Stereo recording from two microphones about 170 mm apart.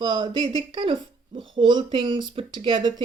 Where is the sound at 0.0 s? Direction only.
25° right (ahead or behind).